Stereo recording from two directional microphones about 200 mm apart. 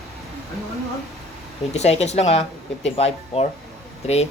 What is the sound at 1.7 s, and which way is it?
Speech, 30° left (ahead or behind).